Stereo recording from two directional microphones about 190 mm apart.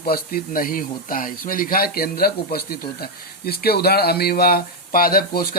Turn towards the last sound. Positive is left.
turn(degrees=50)  # may be behind; listen again after turning